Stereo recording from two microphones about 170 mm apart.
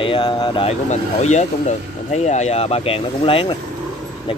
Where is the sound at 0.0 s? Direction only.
30° left (ahead or behind).